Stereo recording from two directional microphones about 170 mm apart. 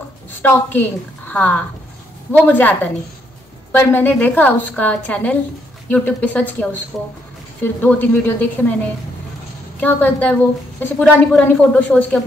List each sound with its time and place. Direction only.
0.4 s a woman's voice: 10° left (ahead or behind)
9.8 s a woman's voice: 10° left (ahead or behind)